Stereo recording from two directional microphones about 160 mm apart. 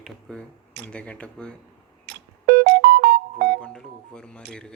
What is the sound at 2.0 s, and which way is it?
Music, 80° right.